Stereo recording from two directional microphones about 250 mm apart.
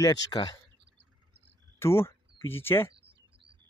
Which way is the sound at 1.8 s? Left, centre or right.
Centre.